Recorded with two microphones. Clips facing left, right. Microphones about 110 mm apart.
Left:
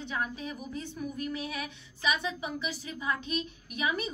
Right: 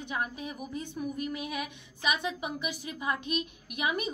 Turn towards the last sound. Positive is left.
turn(degrees=-15)  # may be behind; listen again after turning